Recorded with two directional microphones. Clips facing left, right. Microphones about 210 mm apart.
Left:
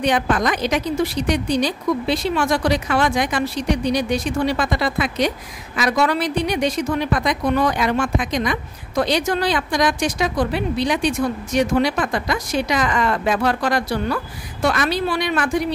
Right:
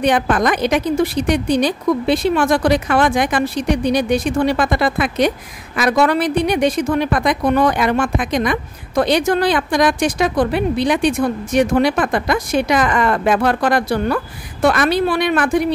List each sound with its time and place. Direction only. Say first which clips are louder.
0.0 s a woman's voice: right 3 dB; 55° right (ahead or behind)